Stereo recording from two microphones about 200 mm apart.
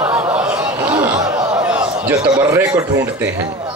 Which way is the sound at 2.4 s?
10° right (ahead or behind).